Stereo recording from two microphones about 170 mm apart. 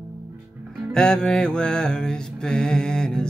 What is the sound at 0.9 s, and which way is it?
Mantra, 5° left (ahead or behind).